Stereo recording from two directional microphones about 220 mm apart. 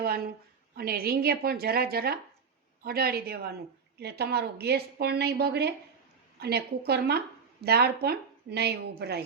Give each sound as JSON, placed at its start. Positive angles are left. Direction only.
{"t": 0.8, "sound": "a woman's voice", "side_deg": -45}